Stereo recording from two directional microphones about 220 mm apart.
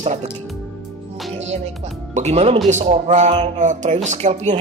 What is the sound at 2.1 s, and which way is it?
Speech, 30° right (ahead or behind).